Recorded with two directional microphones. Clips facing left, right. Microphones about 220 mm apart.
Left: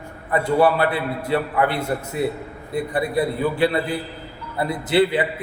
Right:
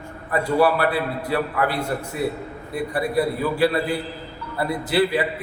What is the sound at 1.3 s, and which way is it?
A man's voice, 25° left (ahead or behind).